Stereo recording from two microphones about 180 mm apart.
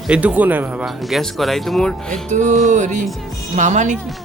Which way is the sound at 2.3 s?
40° right (ahead or behind).